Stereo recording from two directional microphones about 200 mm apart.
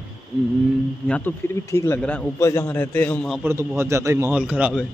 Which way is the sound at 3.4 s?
10° right (ahead or behind).